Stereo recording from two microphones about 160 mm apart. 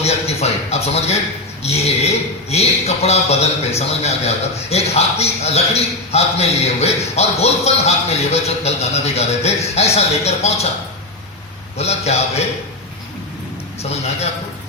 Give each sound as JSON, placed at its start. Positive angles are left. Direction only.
{"t": 0.0, "sound": "a sound", "side_deg": 40}
{"t": 1.6, "sound": "a man's voice", "side_deg": 40}
{"t": 11.8, "sound": "a man's voice", "side_deg": 40}